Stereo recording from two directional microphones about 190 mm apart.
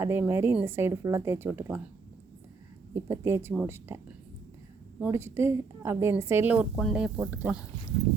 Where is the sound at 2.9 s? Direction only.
15° right (ahead or behind).